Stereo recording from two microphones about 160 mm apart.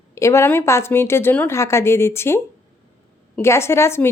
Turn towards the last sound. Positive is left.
turn(degrees=15)  # may be behind; listen again after turning